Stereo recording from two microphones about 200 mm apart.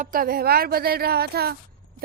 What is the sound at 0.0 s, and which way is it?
A woman's voice, 45° right (ahead or behind).